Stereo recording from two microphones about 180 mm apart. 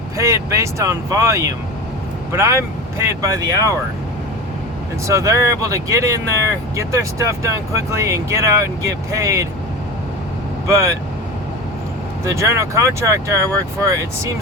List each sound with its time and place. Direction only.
0.2 s speech: 15° right (ahead or behind)
5.0 s speech: 20° right (ahead or behind)
10.7 s speech: 15° right (ahead or behind)
12.2 s speech: 15° right (ahead or behind)